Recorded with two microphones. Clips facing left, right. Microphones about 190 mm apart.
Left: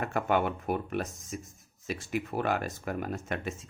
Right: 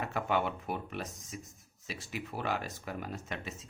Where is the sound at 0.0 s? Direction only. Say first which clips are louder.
Left 4 dB; 50° left (ahead or behind).